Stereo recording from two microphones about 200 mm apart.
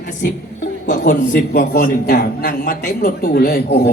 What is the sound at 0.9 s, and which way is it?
A man's voice, 40° left (ahead or behind).